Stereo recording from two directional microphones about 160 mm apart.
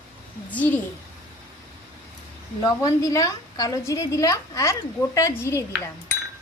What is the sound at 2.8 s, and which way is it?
A woman's voice, 20° left (ahead or behind).